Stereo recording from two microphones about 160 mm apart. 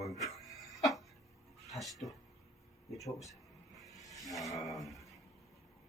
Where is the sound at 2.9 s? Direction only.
Centre (ahead or behind).